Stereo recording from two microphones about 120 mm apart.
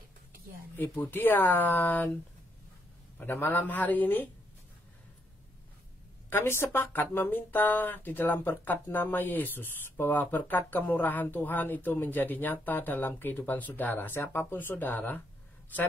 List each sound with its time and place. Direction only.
0.7 s speech: 15° left (ahead or behind)
3.2 s speech: 15° left (ahead or behind)
6.3 s speech: 20° left (ahead or behind)